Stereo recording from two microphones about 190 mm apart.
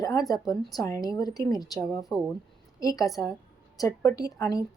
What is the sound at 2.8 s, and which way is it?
A woman's voice, 20° left (ahead or behind).